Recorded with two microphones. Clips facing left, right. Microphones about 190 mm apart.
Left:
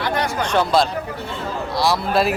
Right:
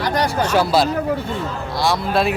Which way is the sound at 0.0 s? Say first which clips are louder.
Right 2 dB; 35° right (ahead or behind).